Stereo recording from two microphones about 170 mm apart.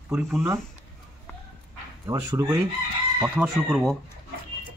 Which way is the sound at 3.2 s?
10° right (ahead or behind).